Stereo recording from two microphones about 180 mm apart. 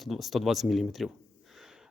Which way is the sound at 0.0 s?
Centre (ahead or behind).